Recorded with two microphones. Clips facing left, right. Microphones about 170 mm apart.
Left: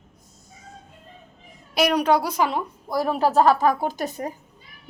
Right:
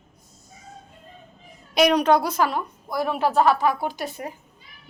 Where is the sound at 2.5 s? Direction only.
35° left (ahead or behind).